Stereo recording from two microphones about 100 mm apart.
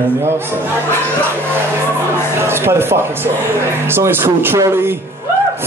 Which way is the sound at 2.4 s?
25° right (ahead or behind).